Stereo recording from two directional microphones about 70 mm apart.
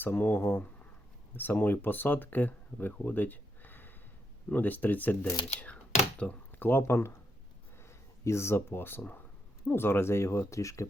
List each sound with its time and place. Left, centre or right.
0.0 s speech: left
6.5 s speech: left
7.8 s a sound: left
9.6 s speech: left